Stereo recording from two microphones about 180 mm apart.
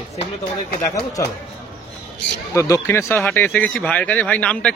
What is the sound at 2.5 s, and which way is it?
Speech, 15° left (ahead or behind).